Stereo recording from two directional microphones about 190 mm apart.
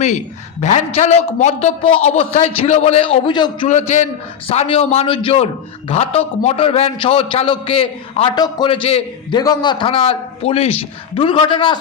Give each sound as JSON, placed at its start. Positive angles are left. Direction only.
{"t": 0.6, "sound": "a man's voice", "side_deg": 35}
{"t": 3.7, "sound": "a man's voice", "side_deg": 35}